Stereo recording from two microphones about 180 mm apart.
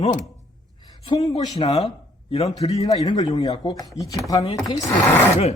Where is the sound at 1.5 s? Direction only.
35° left (ahead or behind).